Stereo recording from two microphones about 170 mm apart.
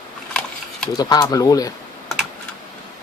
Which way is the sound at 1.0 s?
25° left (ahead or behind).